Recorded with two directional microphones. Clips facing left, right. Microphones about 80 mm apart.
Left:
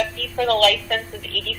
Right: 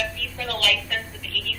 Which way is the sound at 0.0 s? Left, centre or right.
Left.